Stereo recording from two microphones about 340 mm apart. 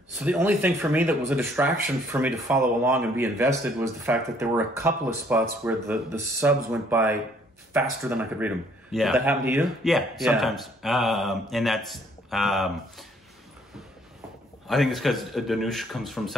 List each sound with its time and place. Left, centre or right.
0.2 s speech: centre
14.7 s speech: centre